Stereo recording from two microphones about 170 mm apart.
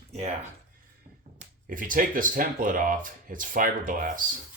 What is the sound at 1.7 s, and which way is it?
Speech, 55° right (ahead or behind).